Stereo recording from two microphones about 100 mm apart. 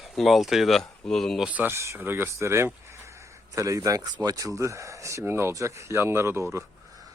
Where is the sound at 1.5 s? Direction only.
15° right (ahead or behind).